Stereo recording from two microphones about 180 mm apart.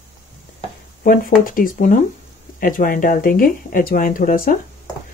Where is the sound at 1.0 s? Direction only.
50° left (ahead or behind).